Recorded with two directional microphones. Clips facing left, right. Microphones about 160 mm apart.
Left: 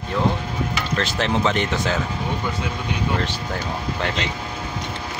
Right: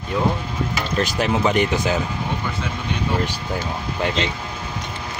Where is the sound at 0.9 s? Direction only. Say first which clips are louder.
Right 2 dB; 15° right (ahead or behind).